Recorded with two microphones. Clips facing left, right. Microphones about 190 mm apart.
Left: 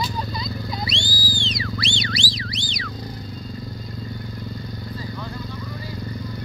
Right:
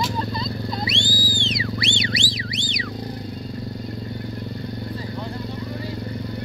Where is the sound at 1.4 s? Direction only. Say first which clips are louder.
Right 2 dB; 20° right (ahead or behind).